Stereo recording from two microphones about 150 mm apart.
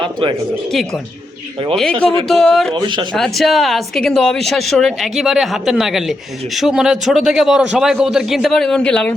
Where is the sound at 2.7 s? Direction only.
30° right (ahead or behind).